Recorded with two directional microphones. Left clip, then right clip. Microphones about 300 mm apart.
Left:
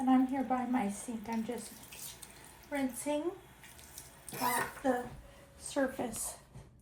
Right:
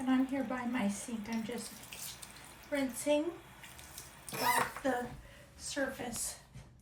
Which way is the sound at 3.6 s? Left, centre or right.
Centre.